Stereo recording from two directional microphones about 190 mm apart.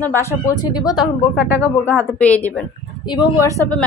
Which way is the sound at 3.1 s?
20° left (ahead or behind).